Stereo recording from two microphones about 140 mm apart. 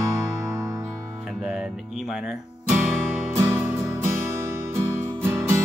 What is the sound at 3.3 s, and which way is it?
Music, 20° right (ahead or behind).